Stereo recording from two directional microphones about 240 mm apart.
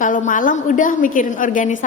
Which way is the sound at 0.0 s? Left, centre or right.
Left.